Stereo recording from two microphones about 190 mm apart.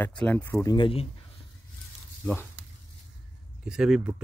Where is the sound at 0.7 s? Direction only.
25° left (ahead or behind).